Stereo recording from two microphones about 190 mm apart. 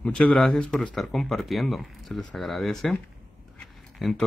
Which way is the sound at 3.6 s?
Centre (ahead or behind).